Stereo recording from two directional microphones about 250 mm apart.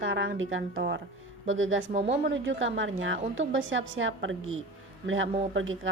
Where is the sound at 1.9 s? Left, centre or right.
Right.